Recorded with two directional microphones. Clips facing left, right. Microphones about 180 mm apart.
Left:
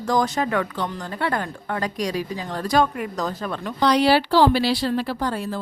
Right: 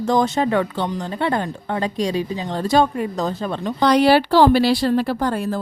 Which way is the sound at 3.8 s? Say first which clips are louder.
Right 3 dB; 50° right (ahead or behind).